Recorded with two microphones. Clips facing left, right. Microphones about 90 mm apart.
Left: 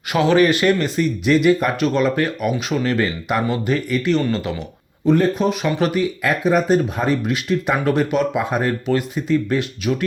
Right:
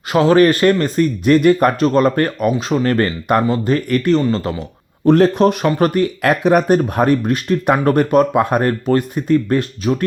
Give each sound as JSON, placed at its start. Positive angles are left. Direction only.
{"t": 0.1, "sound": "speech", "side_deg": -35}
{"t": 3.4, "sound": "speech", "side_deg": -35}
{"t": 3.8, "sound": "speech", "side_deg": -50}
{"t": 4.1, "sound": "speech", "side_deg": -35}
{"t": 5.0, "sound": "speech", "side_deg": -70}
{"t": 6.2, "sound": "speech", "side_deg": -65}
{"t": 7.2, "sound": "speech", "side_deg": -45}